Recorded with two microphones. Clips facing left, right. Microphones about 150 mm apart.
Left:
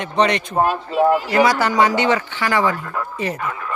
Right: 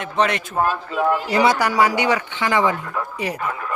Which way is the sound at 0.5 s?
30° left (ahead or behind).